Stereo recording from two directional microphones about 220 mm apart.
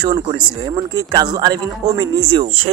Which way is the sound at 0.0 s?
20° right (ahead or behind).